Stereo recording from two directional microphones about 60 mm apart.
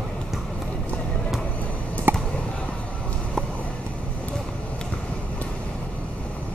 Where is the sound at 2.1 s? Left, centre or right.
Right.